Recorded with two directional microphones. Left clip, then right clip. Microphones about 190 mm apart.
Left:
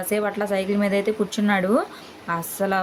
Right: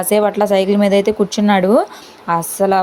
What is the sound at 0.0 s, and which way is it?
Speech, 35° right (ahead or behind).